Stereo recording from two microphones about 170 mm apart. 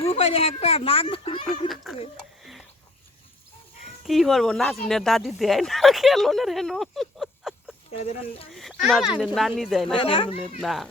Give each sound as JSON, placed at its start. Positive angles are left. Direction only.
{"t": 0.0, "sound": "speech", "side_deg": 35}
{"t": 1.6, "sound": "speech", "side_deg": 0}
{"t": 2.1, "sound": "a sound", "side_deg": 0}
{"t": 4.0, "sound": "speech", "side_deg": 0}
{"t": 7.9, "sound": "speech", "side_deg": 35}
{"t": 8.5, "sound": "speech", "side_deg": 0}
{"t": 9.9, "sound": "speech", "side_deg": 30}
{"t": 10.6, "sound": "speech", "side_deg": 0}